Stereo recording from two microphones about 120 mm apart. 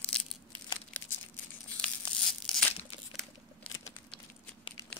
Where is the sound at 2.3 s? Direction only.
5° left (ahead or behind).